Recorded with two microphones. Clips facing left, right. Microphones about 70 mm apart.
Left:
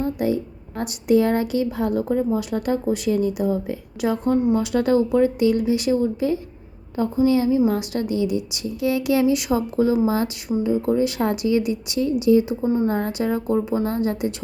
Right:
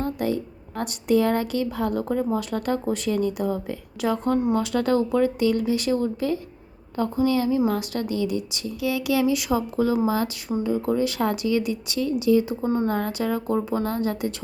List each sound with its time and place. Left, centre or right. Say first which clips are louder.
0.0 s a sound: left 3 dB; centre
0.8 s a woman's voice: left 3 dB; centre
8.8 s speech: left 3 dB; left
12.6 s a woman's voice: left 3 dB; centre
12.9 s speech: left 2 dB; left